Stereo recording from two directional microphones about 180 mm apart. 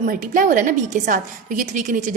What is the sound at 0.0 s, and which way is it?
A woman's voice, 50° right (ahead or behind).